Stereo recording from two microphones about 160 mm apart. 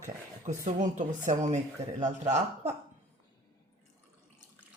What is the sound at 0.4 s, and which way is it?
Speech, 50° right (ahead or behind).